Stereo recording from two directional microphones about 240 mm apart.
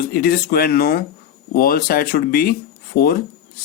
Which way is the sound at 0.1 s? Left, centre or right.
Left.